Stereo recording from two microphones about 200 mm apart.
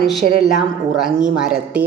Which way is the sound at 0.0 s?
Centre (ahead or behind).